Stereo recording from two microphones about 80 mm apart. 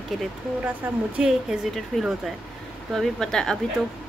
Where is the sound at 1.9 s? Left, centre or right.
Centre.